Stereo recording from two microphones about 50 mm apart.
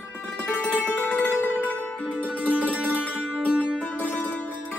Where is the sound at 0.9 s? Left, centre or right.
Left.